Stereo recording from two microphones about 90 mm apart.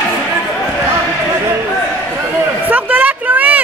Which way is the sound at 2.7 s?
20° right (ahead or behind).